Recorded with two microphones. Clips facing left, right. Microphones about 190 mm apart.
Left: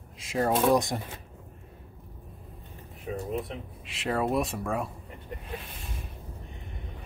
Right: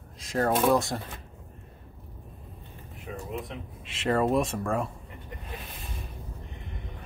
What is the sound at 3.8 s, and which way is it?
Speech, centre (ahead or behind).